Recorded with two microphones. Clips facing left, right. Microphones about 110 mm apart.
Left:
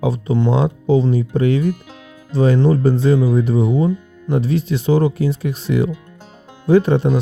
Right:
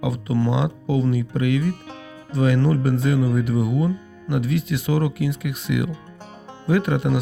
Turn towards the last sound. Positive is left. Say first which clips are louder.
# left 7 dB
turn(degrees=30)  # may be behind; listen again after turning